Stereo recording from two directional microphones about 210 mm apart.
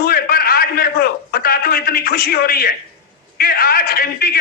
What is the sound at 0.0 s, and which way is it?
A man's voice, 45° left (ahead or behind).